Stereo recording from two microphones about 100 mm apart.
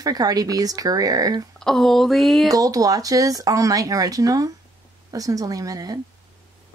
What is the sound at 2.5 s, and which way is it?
Speech, 35° right (ahead or behind).